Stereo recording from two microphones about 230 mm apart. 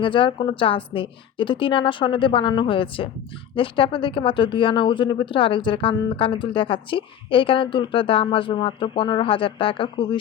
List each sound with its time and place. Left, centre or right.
0.0 s speech: left